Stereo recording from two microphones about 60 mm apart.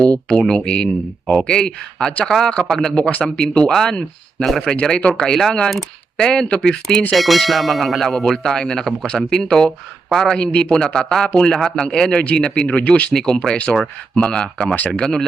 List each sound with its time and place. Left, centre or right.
0.3 s speech: centre
4.7 s speech: centre
5.3 s speech: centre
7.1 s speech: centre